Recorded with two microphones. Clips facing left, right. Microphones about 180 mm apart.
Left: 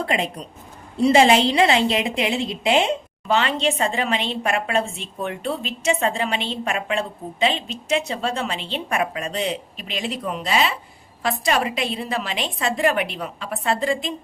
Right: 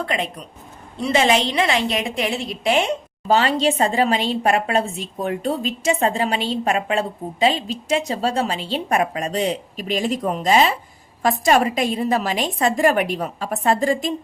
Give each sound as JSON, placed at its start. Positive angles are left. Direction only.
{"t": 0.0, "sound": "a woman's voice", "side_deg": 30}
{"t": 3.2, "sound": "a woman's voice", "side_deg": -35}